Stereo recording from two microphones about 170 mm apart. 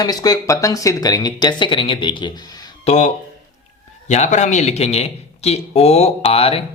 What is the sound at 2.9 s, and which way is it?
Speech, 45° left (ahead or behind).